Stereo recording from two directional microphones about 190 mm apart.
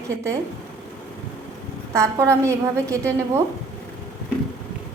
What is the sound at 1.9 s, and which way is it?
A woman's voice, 15° right (ahead or behind).